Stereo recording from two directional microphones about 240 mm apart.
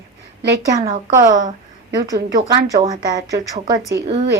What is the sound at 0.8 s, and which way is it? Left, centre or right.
A woman's voice, centre.